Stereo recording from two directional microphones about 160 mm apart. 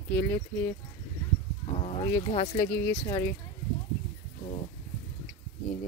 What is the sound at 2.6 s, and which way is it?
Speech, 15° left (ahead or behind).